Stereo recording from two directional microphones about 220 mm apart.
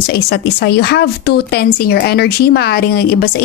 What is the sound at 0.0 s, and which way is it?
A woman's voice, 50° left (ahead or behind).